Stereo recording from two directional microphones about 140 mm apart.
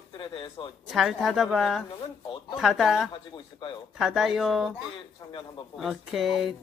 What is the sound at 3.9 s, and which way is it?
Speech, centre (ahead or behind).